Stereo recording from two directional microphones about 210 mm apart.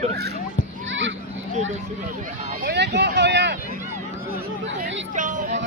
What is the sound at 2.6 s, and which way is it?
Speech, 55° right (ahead or behind).